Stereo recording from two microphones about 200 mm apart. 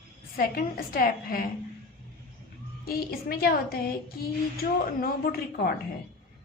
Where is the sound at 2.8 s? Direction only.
50° left (ahead or behind).